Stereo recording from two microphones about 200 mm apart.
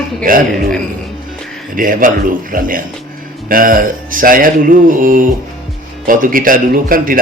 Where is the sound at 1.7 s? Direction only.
45° right (ahead or behind).